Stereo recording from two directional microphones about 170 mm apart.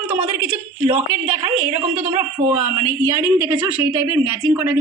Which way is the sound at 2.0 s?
40° right (ahead or behind).